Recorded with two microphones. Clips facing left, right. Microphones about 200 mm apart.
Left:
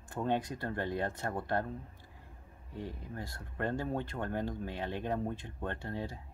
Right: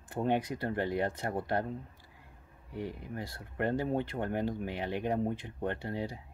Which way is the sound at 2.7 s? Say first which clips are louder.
Right 4 dB; 15° right (ahead or behind).